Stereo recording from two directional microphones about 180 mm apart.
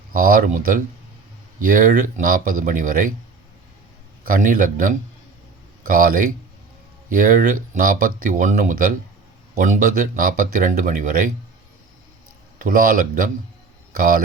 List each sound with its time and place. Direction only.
0.1 s speech: 50° right (ahead or behind)
4.3 s speech: 45° right (ahead or behind)
12.6 s speech: 50° right (ahead or behind)